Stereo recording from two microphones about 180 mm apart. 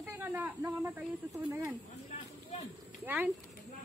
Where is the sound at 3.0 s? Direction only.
10° right (ahead or behind).